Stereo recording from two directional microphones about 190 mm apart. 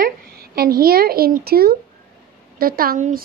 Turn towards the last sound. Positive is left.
turn(degrees=-50)  # may be behind; listen again after turning